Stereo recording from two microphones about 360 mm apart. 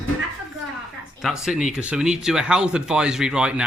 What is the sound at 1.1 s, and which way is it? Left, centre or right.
Speech, centre.